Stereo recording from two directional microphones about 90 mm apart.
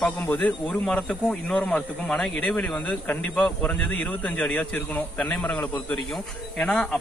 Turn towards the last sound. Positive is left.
turn(degrees=10)  # may be behind; listen again after turning